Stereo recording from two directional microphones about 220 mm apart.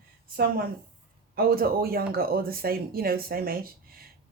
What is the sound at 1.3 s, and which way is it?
A woman's voice, 45° right (ahead or behind).